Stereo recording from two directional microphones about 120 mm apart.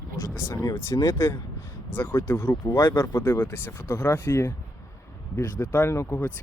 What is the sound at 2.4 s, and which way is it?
Speech, 35° left (ahead or behind).